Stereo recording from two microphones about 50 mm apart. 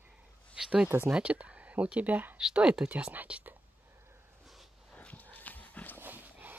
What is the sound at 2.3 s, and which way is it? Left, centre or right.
Speech, centre.